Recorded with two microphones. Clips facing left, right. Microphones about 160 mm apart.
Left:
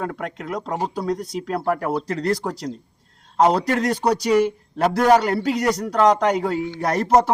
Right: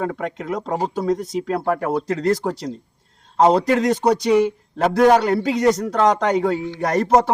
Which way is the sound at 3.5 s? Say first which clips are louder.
Right 4 dB; centre (ahead or behind).